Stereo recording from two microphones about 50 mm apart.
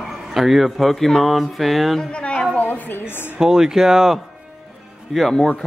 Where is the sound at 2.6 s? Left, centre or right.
Left.